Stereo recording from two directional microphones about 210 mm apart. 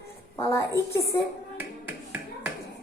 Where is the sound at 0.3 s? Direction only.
15° left (ahead or behind).